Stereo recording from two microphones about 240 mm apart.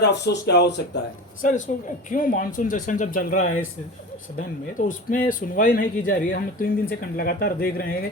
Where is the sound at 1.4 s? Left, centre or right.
Left.